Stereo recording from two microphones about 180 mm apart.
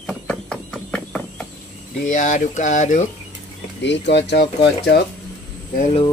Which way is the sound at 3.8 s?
75° left (ahead or behind).